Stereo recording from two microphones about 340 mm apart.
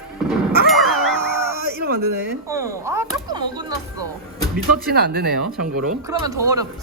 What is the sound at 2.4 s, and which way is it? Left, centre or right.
Speech, centre.